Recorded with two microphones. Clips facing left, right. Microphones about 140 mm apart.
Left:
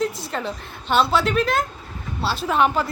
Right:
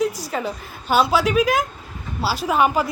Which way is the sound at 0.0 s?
5° right (ahead or behind).